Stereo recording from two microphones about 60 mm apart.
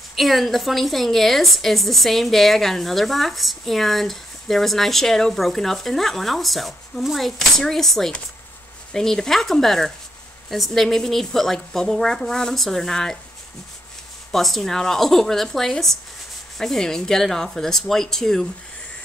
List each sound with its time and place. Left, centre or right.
0.1 s a woman's voice: centre
14.3 s a woman's voice: centre